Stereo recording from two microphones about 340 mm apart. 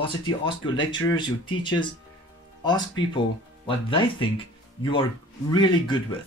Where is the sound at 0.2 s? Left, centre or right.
Centre.